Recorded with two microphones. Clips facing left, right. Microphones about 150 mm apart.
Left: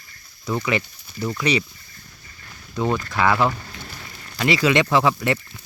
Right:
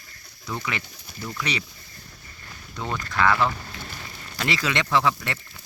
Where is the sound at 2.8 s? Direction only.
15° left (ahead or behind).